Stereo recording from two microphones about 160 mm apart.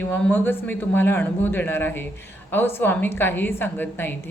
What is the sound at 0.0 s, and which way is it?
A woman's voice, 15° left (ahead or behind).